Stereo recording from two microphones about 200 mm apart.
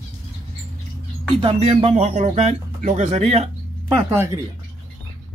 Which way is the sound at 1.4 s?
30° right (ahead or behind).